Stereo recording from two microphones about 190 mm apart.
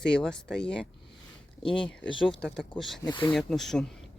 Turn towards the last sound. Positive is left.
turn(degrees=0)  # may be behind; listen again after turning